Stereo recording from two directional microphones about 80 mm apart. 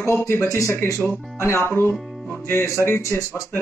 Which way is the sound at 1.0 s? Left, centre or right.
Left.